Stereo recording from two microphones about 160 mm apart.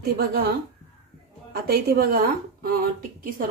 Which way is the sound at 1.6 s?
70° right (ahead or behind).